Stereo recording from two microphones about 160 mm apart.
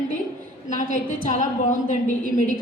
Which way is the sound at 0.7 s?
50° left (ahead or behind).